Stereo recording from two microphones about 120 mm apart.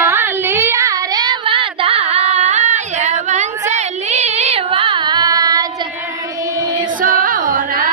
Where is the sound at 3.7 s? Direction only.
70° right (ahead or behind); by 5.7 s 30° right (ahead or behind).